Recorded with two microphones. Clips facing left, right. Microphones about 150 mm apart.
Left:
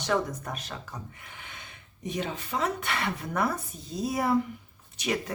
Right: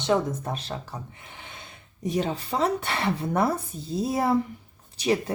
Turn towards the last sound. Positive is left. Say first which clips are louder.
# right 6 dB
turn(degrees=-30)  # may be behind; listen again after turning